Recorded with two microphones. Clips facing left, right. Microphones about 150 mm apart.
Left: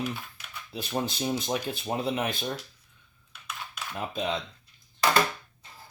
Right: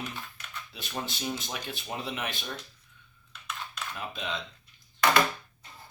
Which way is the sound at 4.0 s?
35° left (ahead or behind).